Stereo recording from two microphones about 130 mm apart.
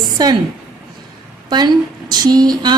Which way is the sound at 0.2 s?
30° right (ahead or behind).